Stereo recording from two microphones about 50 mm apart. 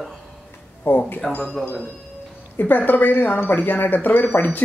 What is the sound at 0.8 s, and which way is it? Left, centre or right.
Speech, left.